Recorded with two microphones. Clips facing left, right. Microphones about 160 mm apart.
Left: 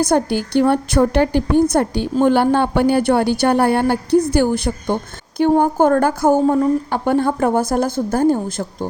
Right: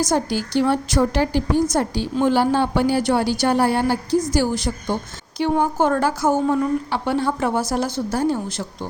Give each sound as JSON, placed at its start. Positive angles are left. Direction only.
{"t": 0.0, "sound": "a woman's voice", "side_deg": 60}
{"t": 6.4, "sound": "a woman's voice", "side_deg": 40}